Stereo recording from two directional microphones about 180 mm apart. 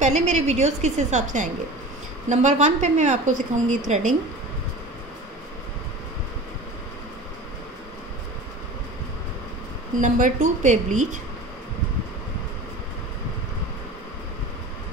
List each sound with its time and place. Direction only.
0.0 s a woman's voice: 40° right (ahead or behind)
9.9 s a woman's voice: 45° right (ahead or behind)